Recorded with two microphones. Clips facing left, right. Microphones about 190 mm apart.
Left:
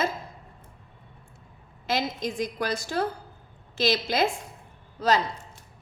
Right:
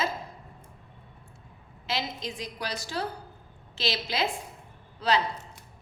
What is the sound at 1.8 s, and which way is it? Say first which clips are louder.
A woman's voice: left 5 dB; 50° left (ahead or behind).